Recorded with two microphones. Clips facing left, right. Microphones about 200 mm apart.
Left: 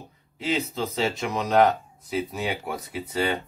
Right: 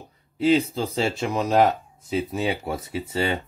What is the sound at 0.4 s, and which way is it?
Speech, 35° right (ahead or behind).